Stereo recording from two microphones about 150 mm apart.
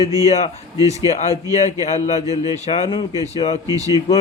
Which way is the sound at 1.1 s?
50° left (ahead or behind).